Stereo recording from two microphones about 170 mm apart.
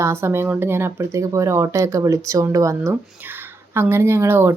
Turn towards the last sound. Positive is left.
turn(degrees=-15)  # may be behind; listen again after turning